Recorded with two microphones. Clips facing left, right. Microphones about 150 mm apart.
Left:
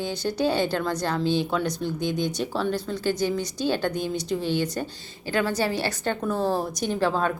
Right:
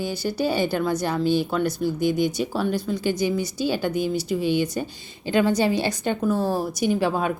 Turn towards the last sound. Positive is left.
turn(degrees=-10)  # may be behind; listen again after turning